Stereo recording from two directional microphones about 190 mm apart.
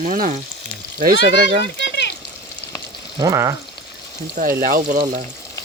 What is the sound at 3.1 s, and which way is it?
Frying, 15° right (ahead or behind).